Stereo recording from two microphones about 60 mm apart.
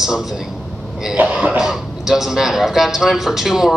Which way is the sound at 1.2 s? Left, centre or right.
Centre.